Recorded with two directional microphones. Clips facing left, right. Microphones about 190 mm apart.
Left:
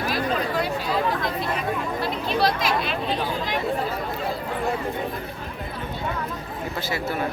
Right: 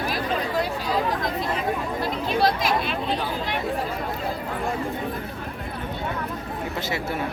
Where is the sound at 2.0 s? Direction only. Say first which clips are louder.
Right 1 dB; 50° right (ahead or behind).